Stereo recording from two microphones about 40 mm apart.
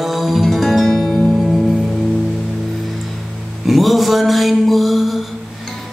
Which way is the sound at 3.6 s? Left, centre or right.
Centre.